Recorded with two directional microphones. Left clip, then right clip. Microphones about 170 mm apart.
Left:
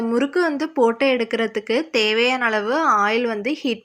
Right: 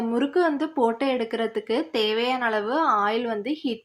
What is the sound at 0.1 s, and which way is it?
Speech, 15° left (ahead or behind).